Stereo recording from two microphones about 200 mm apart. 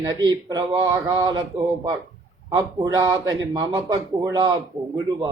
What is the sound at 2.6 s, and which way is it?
Speech, 15° right (ahead or behind).